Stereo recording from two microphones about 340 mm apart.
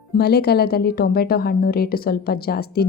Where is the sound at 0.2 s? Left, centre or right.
Left.